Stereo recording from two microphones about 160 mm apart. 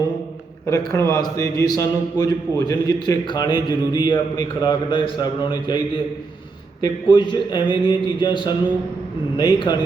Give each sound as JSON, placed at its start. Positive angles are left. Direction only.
{"t": 1.2, "sound": "a man's voice", "side_deg": 25}
{"t": 6.8, "sound": "a man's voice", "side_deg": 30}